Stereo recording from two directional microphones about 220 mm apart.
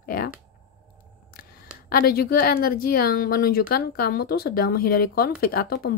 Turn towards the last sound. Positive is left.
turn(degrees=45)  # may be behind; listen again after turning